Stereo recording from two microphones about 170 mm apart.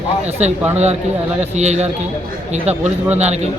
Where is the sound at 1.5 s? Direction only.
40° right (ahead or behind).